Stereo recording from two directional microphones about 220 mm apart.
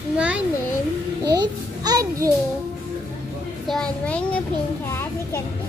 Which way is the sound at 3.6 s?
5° left (ahead or behind).